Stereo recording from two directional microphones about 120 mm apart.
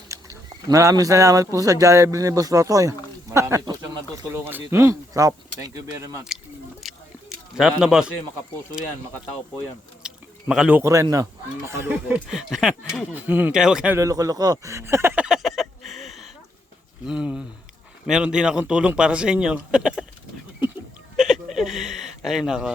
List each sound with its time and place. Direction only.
0.1 s speech: 25° right (ahead or behind)
4.4 s speech: 20° right (ahead or behind)
6.8 s biting: centre (ahead or behind)
7.8 s speech: 5° right (ahead or behind)
10.0 s a sound: 5° right (ahead or behind)
10.5 s speech: 5° right (ahead or behind)
10.8 s speech: 25° right (ahead or behind)
12.0 s speech: 5° right (ahead or behind)
13.5 s speech: 5° right (ahead or behind)
13.9 s a sound: 25° right (ahead or behind); by 16.3 s centre (ahead or behind)
17.1 s speech: 10° right (ahead or behind)
21.2 s a sound: 5° right (ahead or behind)